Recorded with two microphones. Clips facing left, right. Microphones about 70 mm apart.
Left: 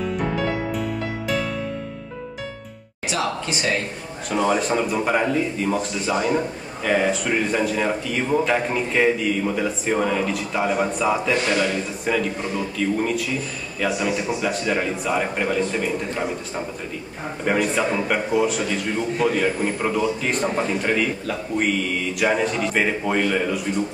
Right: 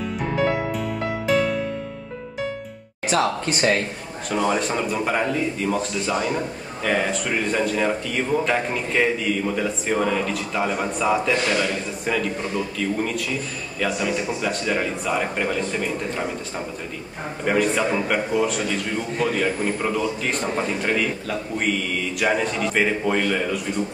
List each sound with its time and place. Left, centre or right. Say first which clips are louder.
1.2 s music: right 6 dB; centre
3.1 s a woman's voice: right 3 dB; right
4.3 s speech: left 2 dB; centre